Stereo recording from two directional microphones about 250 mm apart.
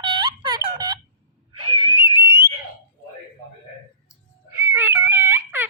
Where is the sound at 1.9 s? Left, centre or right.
Centre.